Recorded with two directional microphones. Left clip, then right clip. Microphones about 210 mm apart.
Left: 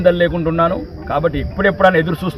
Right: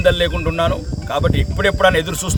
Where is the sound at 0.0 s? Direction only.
40° right (ahead or behind).